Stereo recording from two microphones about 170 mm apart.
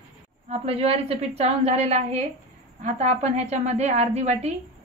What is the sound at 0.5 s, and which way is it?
A woman's voice, 35° right (ahead or behind).